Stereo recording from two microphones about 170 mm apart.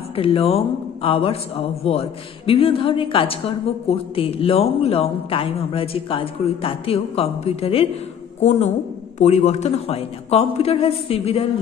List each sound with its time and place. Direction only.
0.1 s a man's voice: 35° left (ahead or behind)